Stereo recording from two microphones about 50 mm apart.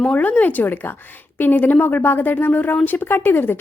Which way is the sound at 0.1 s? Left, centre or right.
Left.